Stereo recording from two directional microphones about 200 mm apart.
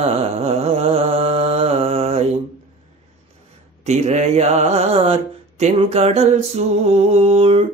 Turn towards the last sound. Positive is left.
turn(degrees=-30)  # may be behind; listen again after turning